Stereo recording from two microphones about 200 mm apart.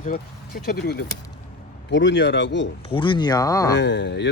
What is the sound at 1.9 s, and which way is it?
Speech, 65° left (ahead or behind).